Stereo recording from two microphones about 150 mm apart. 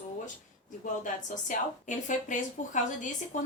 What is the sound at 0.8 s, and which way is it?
Speech, 55° left (ahead or behind).